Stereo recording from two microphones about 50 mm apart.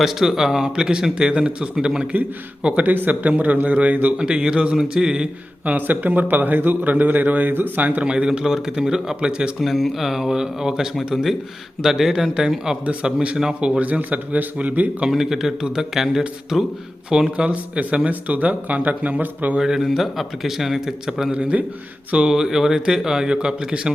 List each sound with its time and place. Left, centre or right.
0.0 s speech: centre
2.6 s a man's voice: right
4.2 s speech: centre
5.7 s a man's voice: right
8.0 s speech: right
9.6 s speech: centre
12.8 s speech: right
15.1 s a man's voice: centre; by 19.5 s right
19.5 s speech: centre
21.3 s speech: right
22.3 s speech: centre